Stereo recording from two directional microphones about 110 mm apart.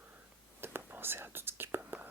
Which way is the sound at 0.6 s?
20° right (ahead or behind).